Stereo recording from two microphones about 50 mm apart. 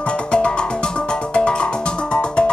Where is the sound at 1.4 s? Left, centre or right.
Centre.